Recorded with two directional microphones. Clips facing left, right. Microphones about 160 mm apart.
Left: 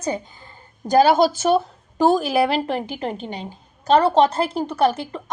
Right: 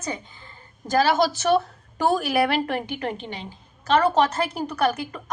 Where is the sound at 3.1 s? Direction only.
40° left (ahead or behind).